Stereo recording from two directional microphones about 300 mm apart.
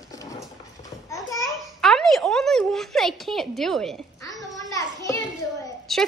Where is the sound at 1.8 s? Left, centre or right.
Centre.